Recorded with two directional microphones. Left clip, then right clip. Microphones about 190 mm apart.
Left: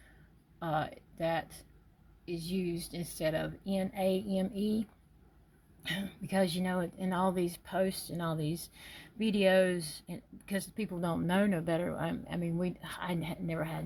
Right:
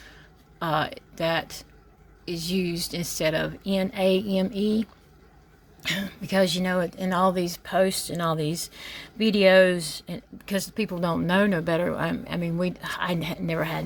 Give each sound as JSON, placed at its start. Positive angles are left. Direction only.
{"t": 0.6, "sound": "speech", "side_deg": -20}